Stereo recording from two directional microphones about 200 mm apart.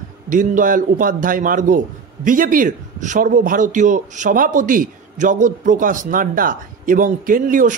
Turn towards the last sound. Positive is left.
turn(degrees=-40)  # may be behind; listen again after turning